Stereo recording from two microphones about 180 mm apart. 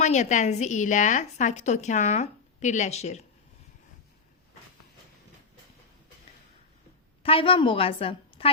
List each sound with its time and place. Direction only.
0.0 s a woman's voice: 40° left (ahead or behind)
7.2 s a woman's voice: 30° left (ahead or behind)